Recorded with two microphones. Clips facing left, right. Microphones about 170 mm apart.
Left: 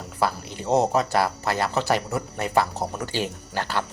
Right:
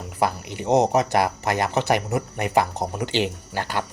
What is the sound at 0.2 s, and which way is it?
Speech, 15° right (ahead or behind).